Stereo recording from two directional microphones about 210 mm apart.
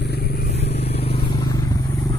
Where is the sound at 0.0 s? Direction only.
50° left (ahead or behind).